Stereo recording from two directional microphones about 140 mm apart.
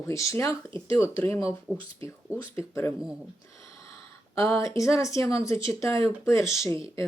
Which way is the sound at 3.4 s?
20° left (ahead or behind).